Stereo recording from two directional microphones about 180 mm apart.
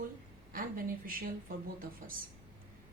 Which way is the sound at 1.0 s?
50° right (ahead or behind).